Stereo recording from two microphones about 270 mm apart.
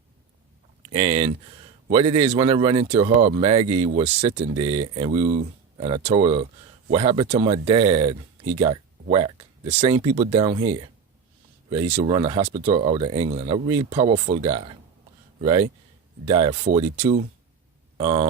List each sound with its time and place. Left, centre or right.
0.9 s speech: right